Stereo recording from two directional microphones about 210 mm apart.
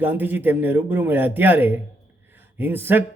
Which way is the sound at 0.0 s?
10° right (ahead or behind).